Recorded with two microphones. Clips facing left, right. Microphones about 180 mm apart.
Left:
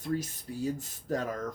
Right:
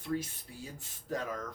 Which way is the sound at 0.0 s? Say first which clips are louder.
Left 3 dB; 40° left (ahead or behind).